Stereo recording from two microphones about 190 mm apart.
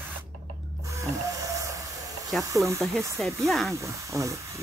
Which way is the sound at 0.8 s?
15° right (ahead or behind).